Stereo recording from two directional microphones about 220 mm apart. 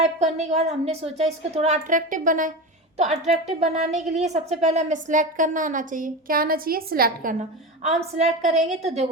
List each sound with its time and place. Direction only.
0.0 s a woman's voice: 30° right (ahead or behind)
7.8 s a woman's voice: 30° right (ahead or behind)